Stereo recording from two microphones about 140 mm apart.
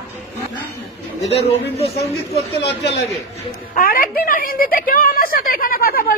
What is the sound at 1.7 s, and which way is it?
Speech, 45° left (ahead or behind).